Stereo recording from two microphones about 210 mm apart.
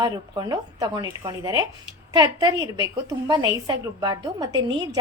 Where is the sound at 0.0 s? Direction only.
20° right (ahead or behind).